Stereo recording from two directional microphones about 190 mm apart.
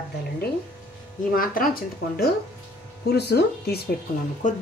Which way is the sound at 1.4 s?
50° left (ahead or behind).